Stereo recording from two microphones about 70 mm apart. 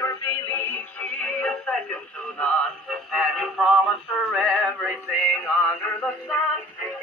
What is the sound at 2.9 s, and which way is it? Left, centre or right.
Synthetic singing, centre.